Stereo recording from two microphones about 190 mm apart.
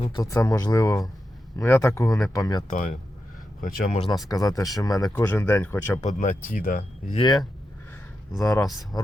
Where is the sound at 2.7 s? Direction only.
45° left (ahead or behind).